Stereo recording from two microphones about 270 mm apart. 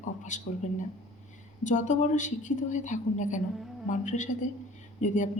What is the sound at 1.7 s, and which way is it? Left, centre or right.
A woman's voice, left.